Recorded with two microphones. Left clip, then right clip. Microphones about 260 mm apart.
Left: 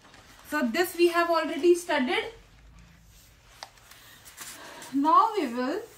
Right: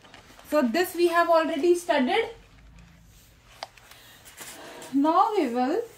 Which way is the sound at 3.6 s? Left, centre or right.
Centre.